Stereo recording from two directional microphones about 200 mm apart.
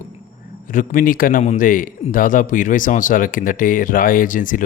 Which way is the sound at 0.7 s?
40° left (ahead or behind).